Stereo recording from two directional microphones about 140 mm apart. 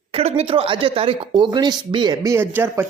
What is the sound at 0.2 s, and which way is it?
Speech, 45° right (ahead or behind).